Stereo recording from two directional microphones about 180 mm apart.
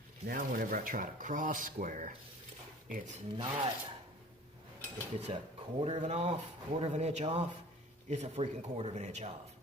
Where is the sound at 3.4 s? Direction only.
25° right (ahead or behind).